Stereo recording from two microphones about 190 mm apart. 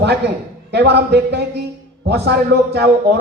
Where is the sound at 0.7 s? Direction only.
60° right (ahead or behind).